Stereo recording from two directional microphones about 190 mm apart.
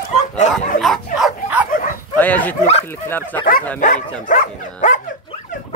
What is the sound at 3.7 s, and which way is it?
Speech, 45° left (ahead or behind).